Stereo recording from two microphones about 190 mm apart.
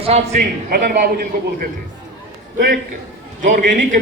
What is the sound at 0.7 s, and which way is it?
Speech, 50° right (ahead or behind).